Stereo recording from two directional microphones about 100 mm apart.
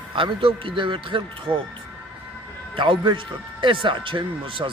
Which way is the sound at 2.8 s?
55° right (ahead or behind).